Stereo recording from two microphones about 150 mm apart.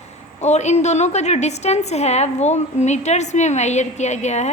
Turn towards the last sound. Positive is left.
turn(degrees=50)  # may be behind; listen again after turning